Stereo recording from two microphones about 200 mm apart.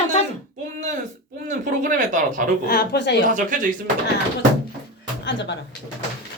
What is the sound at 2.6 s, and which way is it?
Speech, 50° left (ahead or behind).